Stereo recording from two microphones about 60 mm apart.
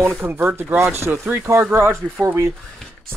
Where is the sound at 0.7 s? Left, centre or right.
Right.